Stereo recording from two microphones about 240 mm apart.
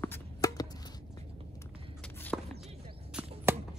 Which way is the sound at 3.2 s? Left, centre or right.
Centre.